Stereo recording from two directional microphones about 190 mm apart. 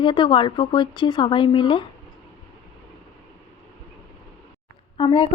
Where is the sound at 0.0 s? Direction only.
25° left (ahead or behind).